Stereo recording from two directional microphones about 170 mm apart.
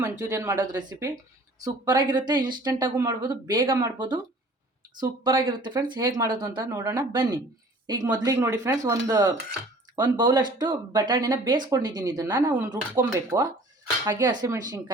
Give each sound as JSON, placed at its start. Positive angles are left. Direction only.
{"t": 0.0, "sound": "speech", "side_deg": -20}